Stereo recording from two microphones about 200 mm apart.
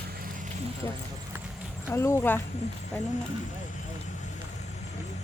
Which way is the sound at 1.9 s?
15° left (ahead or behind).